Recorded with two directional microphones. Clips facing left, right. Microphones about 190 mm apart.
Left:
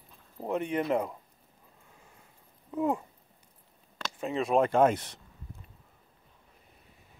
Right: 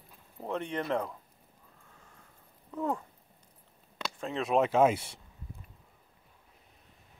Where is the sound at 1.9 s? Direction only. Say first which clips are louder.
Left 1 dB; 10° left (ahead or behind).